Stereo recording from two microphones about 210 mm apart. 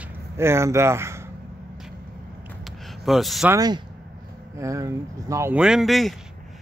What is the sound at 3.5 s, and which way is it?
Speech, 20° right (ahead or behind).